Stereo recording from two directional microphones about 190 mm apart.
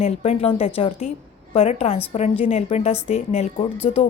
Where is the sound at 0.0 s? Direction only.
30° left (ahead or behind).